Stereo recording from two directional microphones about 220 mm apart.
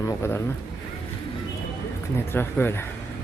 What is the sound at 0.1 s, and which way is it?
Speech, 10° left (ahead or behind).